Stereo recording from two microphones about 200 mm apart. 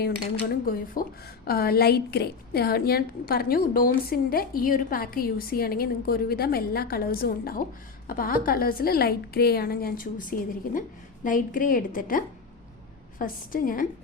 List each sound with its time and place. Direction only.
0.4 s a woman's voice: 45° left (ahead or behind)